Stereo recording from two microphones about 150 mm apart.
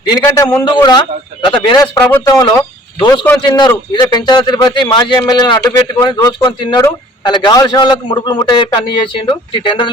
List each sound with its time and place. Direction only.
0.1 s a man's voice: 25° left (ahead or behind)